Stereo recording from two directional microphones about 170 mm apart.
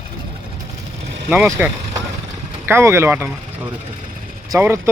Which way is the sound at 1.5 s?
15° right (ahead or behind).